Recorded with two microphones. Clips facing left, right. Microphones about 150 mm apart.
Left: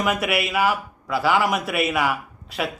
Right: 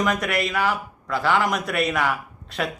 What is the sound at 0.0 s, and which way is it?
A man's voice, 5° left (ahead or behind).